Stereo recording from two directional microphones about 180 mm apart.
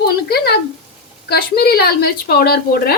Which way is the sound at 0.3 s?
65° left (ahead or behind).